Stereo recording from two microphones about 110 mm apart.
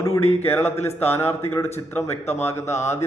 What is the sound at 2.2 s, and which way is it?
Speech, 75° left (ahead or behind).